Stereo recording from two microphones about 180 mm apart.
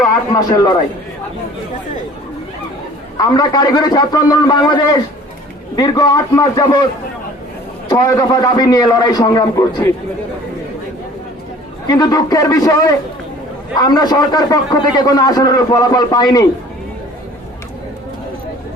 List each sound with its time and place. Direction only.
0.3 s a man's voice: 20° left (ahead or behind)
3.2 s a man's voice: 20° left (ahead or behind)
7.9 s a man's voice: 20° left (ahead or behind)
11.9 s a man's voice: 20° left (ahead or behind)